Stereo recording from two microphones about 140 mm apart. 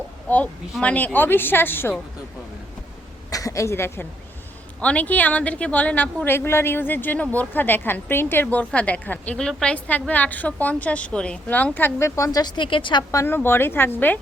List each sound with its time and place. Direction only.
0.8 s a woman's voice: 10° left (ahead or behind)
3.2 s a woman's voice: 25° left (ahead or behind)
13.1 s a woman's voice: 20° left (ahead or behind)